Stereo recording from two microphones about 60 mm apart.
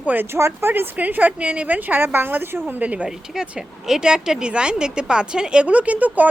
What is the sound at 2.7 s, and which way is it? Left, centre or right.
Speech, right.